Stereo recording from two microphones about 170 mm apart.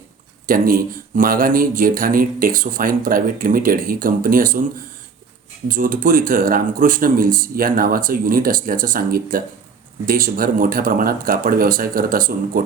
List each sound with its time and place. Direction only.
0.4 s speech: 55° right (ahead or behind)
5.6 s speech: 55° right (ahead or behind)